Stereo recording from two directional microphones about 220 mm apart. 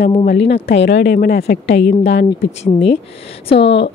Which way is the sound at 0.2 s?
50° left (ahead or behind).